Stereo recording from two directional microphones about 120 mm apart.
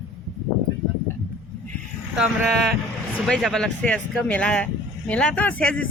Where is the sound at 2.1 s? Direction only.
5° right (ahead or behind).